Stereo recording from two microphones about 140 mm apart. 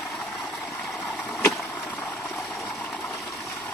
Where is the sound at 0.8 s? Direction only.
Centre (ahead or behind).